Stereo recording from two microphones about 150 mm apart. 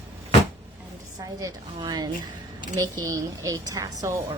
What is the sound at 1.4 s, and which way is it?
A woman's voice, 30° right (ahead or behind).